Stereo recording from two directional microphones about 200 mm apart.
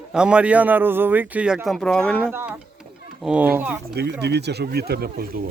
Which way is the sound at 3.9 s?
55° right (ahead or behind).